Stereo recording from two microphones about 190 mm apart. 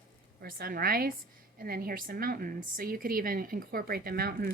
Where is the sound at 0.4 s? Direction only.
50° right (ahead or behind).